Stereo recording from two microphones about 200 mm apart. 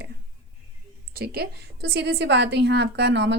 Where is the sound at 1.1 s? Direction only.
50° right (ahead or behind).